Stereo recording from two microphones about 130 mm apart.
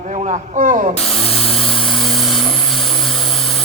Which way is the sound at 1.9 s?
Centre (ahead or behind).